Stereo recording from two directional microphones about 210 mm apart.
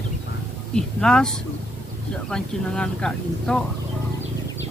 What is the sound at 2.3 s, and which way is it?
Speech, 5° left (ahead or behind).